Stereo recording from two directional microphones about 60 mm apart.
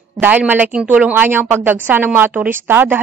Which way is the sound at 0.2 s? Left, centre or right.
Right.